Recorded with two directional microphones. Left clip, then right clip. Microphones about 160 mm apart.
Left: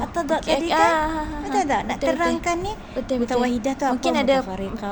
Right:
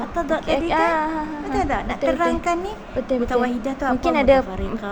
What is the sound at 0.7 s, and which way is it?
Child singing, 5° left (ahead or behind).